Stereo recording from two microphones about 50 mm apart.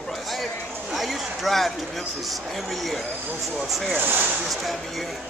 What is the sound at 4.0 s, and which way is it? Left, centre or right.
Speech, right.